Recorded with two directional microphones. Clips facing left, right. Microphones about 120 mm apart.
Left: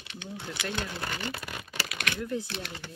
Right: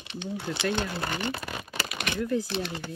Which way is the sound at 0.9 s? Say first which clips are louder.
Right 4 dB; 65° right (ahead or behind).